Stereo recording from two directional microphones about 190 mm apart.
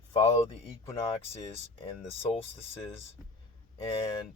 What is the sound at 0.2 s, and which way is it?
Speech, 20° left (ahead or behind).